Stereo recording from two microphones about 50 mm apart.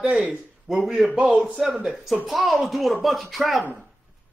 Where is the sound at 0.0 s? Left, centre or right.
Right.